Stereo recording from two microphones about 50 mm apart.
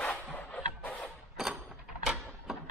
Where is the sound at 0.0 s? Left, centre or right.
Left.